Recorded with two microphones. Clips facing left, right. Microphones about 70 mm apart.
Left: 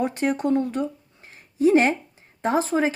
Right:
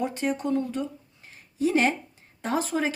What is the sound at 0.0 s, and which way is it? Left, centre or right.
Speech, left.